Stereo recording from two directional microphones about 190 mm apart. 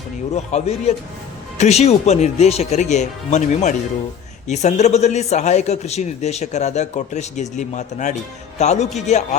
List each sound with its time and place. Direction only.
0.3 s a man's voice: 35° left (ahead or behind)